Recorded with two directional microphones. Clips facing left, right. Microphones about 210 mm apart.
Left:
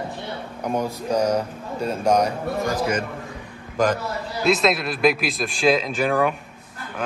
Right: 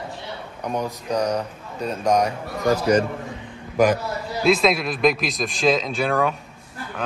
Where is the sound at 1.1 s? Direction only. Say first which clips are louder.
Left 2 dB; 5° left (ahead or behind).